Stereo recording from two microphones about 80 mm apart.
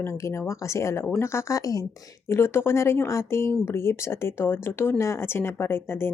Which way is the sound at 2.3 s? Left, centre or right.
Left.